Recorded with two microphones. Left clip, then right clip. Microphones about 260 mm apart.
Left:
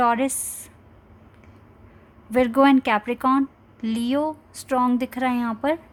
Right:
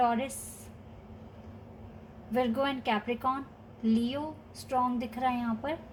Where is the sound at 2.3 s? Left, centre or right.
Left.